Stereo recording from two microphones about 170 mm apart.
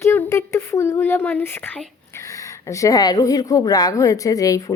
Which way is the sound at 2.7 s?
20° left (ahead or behind).